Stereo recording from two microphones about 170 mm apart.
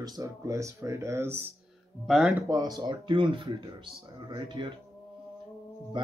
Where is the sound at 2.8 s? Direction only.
25° right (ahead or behind).